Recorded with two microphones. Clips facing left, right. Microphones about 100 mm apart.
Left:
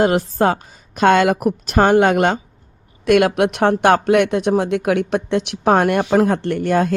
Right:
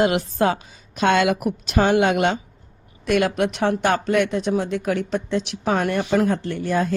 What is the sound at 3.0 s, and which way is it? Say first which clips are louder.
Speech: left 6 dB; 60° left (ahead or behind).